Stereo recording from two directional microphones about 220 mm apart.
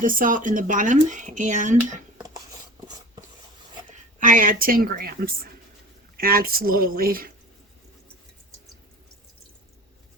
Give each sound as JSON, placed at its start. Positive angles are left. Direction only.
{"t": 0.0, "sound": "speech", "side_deg": -40}
{"t": 4.2, "sound": "speech", "side_deg": -40}